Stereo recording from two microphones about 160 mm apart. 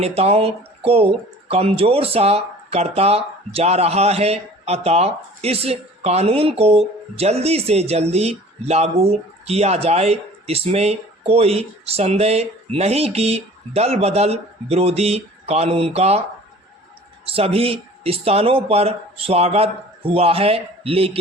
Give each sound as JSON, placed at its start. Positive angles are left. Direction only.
{"t": 0.0, "sound": "speech", "side_deg": -40}
{"t": 17.2, "sound": "speech", "side_deg": -35}